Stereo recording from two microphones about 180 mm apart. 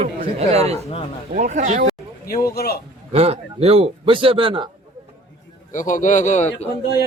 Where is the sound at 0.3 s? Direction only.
35° right (ahead or behind).